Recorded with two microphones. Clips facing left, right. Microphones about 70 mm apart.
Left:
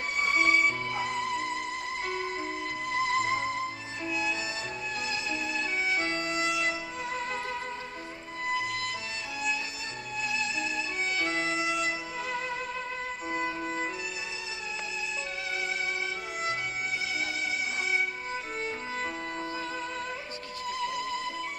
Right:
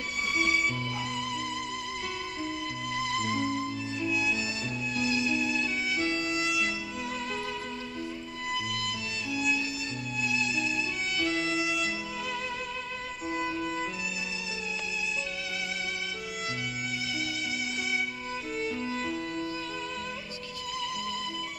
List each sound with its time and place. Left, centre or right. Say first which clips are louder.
0.2 s music: left 3 dB; left
8.5 s music: left 2 dB; left
10.2 s music: right 2 dB; left
18.9 s music: right 1 dB; left
20.8 s music: left 3 dB; left